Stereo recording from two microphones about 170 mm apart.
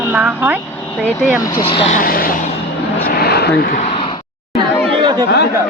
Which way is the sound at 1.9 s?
55° left (ahead or behind).